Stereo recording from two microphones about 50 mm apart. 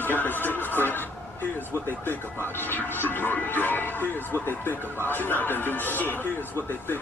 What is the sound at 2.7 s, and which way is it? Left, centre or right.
Speech, left.